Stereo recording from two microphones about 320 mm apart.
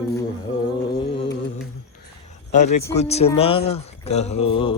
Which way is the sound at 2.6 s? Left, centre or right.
Left.